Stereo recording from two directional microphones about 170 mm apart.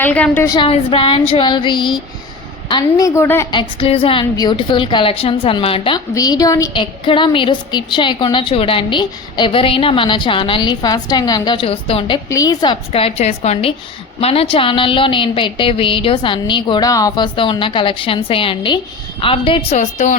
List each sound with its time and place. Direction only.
0.0 s a woman's voice: 10° left (ahead or behind)
0.5 s a woman's voice: 30° left (ahead or behind)
3.2 s a woman's voice: 15° left (ahead or behind)
3.5 s a woman's voice: 30° left (ahead or behind)
6.1 s a woman's voice: 20° left (ahead or behind)
12.3 s a woman's voice: 20° left (ahead or behind); by 20.1 s 45° left (ahead or behind)